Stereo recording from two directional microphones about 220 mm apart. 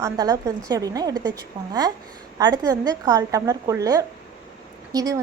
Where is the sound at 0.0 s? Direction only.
15° right (ahead or behind).